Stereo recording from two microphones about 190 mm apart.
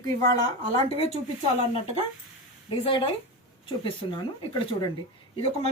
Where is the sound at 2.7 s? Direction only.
30° left (ahead or behind).